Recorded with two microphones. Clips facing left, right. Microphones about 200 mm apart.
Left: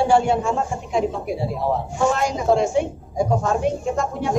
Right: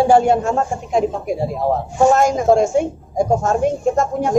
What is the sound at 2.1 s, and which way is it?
Speech, 45° right (ahead or behind).